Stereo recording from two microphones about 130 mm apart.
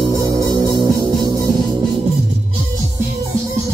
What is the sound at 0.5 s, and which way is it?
Music, 35° right (ahead or behind).